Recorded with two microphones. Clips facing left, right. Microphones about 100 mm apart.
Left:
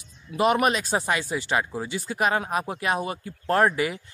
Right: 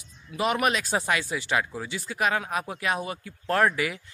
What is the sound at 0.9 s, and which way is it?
Speech, 30° left (ahead or behind).